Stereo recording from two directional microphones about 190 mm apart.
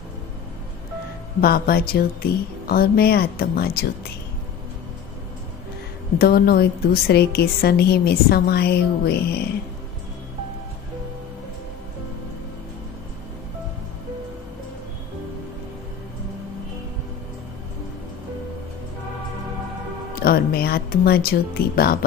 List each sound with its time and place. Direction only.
1.4 s speech: 50° left (ahead or behind)
6.1 s a woman's voice: 55° left (ahead or behind)
20.2 s speech: 50° left (ahead or behind)